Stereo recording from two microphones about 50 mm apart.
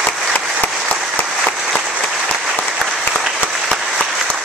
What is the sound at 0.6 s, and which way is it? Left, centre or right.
Applause, left.